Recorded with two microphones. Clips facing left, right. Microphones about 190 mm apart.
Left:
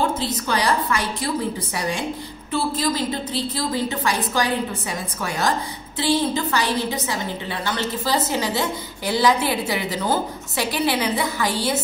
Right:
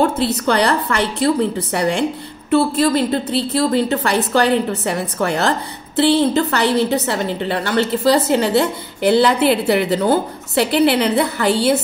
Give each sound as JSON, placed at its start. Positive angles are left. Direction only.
{"t": 0.0, "sound": "a woman's voice", "side_deg": -65}